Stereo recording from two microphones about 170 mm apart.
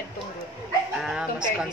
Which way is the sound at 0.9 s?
5° right (ahead or behind).